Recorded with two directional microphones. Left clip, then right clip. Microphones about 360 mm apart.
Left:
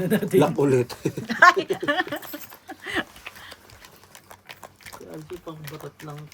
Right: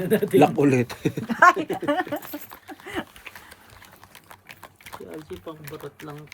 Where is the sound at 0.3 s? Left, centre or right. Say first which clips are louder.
Right 1 dB; right.